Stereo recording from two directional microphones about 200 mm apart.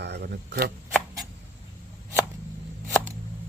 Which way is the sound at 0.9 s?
Centre (ahead or behind).